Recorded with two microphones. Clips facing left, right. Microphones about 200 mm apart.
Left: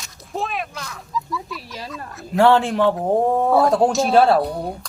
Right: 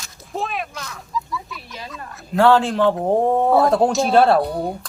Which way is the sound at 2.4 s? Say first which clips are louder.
Even; 15° left (ahead or behind).